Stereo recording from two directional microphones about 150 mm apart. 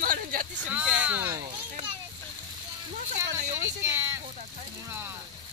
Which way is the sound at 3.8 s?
15° right (ahead or behind).